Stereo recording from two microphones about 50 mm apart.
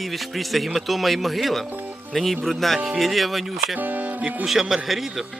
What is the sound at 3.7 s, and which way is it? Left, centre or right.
Speech, right.